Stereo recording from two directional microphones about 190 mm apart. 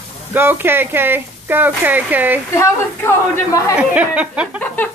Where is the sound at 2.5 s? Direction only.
15° left (ahead or behind).